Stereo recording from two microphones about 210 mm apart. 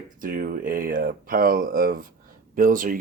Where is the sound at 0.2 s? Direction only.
40° right (ahead or behind).